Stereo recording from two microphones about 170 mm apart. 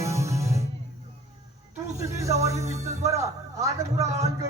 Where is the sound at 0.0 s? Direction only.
15° right (ahead or behind).